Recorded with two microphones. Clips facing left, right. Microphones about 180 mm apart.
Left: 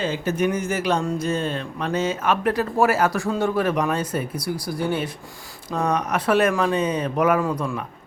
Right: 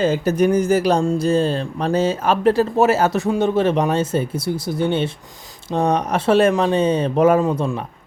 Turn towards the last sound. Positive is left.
turn(degrees=-25)  # may be behind; listen again after turning